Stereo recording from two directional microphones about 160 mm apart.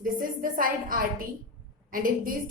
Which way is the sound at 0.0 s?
60° right (ahead or behind).